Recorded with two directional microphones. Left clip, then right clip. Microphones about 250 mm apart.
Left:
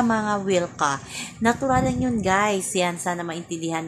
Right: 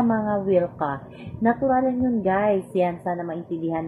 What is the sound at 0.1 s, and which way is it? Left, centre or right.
A woman's voice, left.